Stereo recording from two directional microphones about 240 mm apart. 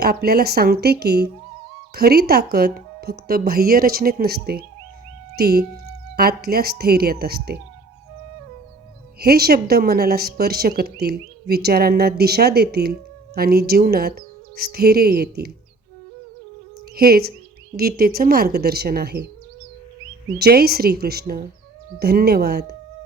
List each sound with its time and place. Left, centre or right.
0.0 s speech: right
9.2 s speech: right
16.9 s speech: right
20.4 s speech: right